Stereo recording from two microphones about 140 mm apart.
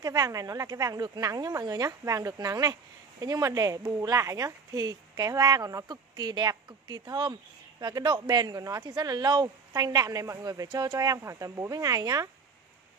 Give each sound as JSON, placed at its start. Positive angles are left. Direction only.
{"t": 0.0, "sound": "speech", "side_deg": -25}